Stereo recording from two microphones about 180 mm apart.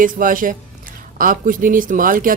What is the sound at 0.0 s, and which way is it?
Speech, 50° right (ahead or behind).